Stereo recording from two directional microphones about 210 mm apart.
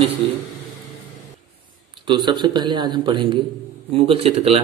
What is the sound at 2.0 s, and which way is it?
A man's voice, 20° right (ahead or behind).